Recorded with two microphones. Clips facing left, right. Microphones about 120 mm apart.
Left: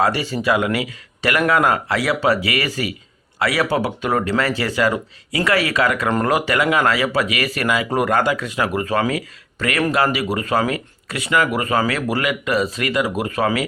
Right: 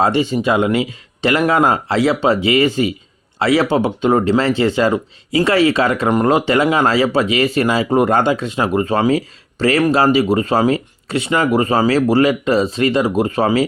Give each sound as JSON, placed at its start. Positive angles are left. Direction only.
{"t": 0.0, "sound": "speech", "side_deg": -20}